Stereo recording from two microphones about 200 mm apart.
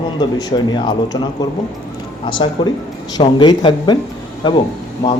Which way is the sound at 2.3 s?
25° left (ahead or behind).